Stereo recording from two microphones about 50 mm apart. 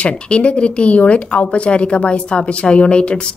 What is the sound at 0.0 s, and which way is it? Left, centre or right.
Speech, left.